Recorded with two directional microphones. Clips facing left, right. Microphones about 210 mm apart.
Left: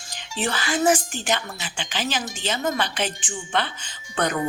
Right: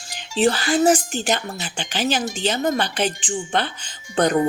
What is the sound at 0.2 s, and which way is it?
A woman's voice, 35° right (ahead or behind).